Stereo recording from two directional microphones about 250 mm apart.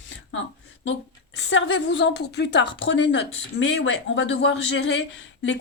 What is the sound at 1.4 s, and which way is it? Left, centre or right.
A woman's voice, left.